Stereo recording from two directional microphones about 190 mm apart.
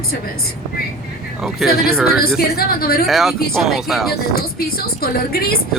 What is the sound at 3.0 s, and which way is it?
Speech, centre (ahead or behind).